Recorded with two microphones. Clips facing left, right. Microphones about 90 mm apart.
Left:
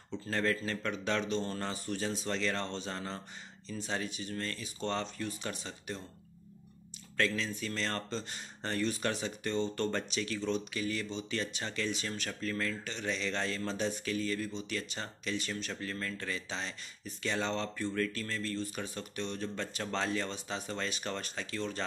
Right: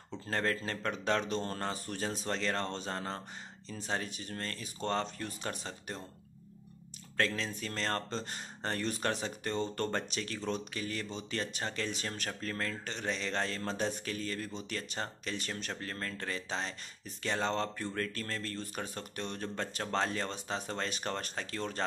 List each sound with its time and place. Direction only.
0.3 s speech: 40° right (ahead or behind)
7.2 s speech: 40° right (ahead or behind)
12.3 s speech: 40° right (ahead or behind)